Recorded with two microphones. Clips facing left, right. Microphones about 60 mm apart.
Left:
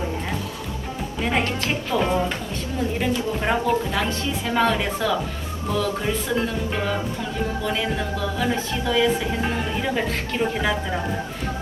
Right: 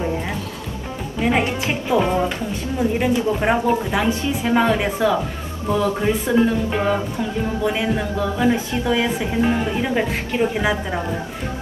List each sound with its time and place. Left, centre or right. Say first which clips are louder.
1.2 s a woman's voice: right 4 dB; centre
2.0 s a woman's voice: right 1 dB; centre